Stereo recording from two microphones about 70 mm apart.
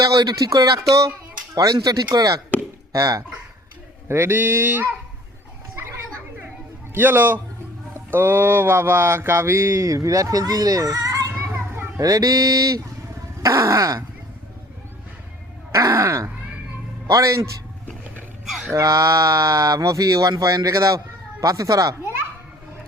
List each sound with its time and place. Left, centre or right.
0.0 s speech: right
4.1 s mantra: right
6.9 s a man's voice: right
7.9 s mantra: right
11.5 s children playing: right
11.9 s speech: right
13.4 s speech: right
15.7 s speech: right
18.4 s a sound: centre
18.7 s speech: right